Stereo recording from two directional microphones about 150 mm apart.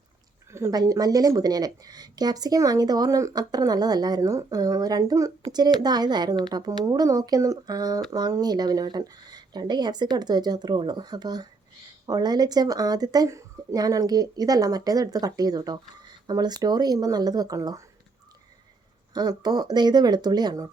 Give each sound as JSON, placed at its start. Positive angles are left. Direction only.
{"t": 0.5, "sound": "speech", "side_deg": -20}
{"t": 19.1, "sound": "speech", "side_deg": -25}